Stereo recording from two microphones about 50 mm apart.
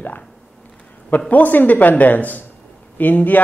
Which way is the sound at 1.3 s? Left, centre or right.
Left.